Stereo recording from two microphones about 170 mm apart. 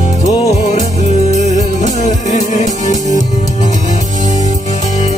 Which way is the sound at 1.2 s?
45° left (ahead or behind).